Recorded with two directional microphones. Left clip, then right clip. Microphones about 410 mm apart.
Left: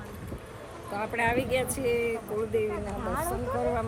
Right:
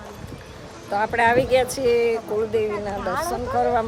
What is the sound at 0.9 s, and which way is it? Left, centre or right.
Speech, centre.